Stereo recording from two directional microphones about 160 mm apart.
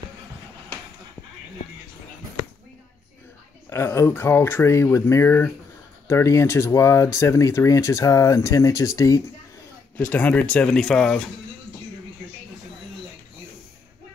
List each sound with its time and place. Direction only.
3.7 s speech: 15° left (ahead or behind)
9.9 s speech: 10° left (ahead or behind)